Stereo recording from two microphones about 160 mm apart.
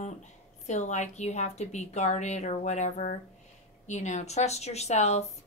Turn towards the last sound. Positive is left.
turn(degrees=45)  # may be behind; listen again after turning